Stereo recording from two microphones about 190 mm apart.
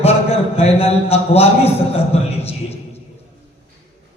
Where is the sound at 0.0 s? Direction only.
30° left (ahead or behind).